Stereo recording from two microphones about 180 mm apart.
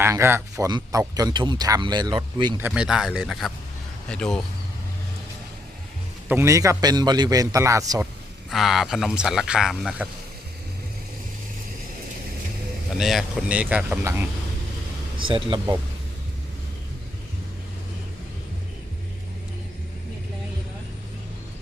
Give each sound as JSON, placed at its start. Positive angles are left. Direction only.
{"t": 0.0, "sound": "speech", "side_deg": -15}
{"t": 2.6, "sound": "speech", "side_deg": -5}
{"t": 6.2, "sound": "a man's voice", "side_deg": -15}
{"t": 8.4, "sound": "speech", "side_deg": 0}
{"t": 13.0, "sound": "a man's voice", "side_deg": 0}
{"t": 15.2, "sound": "speech", "side_deg": -30}